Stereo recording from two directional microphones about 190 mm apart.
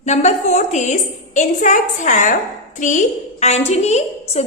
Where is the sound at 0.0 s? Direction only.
35° left (ahead or behind).